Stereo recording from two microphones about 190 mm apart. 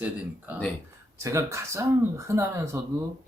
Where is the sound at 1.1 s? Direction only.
15° right (ahead or behind).